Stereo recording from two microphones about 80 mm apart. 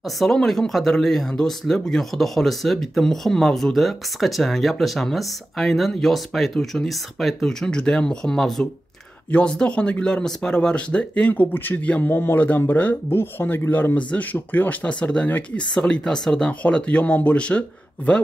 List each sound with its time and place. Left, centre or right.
0.2 s speech: centre